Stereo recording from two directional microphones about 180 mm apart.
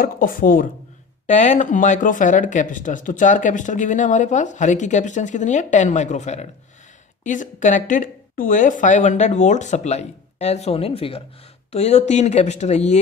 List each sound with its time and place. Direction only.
0.0 s speech: 50° left (ahead or behind)